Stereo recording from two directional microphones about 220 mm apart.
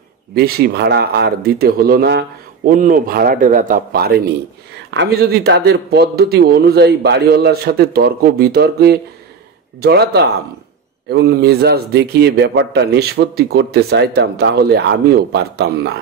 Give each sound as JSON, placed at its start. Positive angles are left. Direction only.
{"t": 0.3, "sound": "speech", "side_deg": -45}